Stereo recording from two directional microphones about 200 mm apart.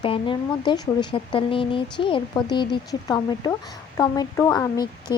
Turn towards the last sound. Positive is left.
turn(degrees=20)  # may be behind; listen again after turning